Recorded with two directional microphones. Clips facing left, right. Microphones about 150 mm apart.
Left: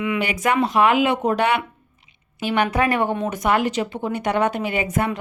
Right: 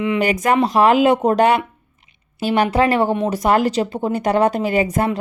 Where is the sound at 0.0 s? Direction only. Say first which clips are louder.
Right 4 dB; 35° right (ahead or behind).